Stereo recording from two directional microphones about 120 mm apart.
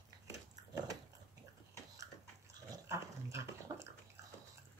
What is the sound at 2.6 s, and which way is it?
Dog, 25° right (ahead or behind).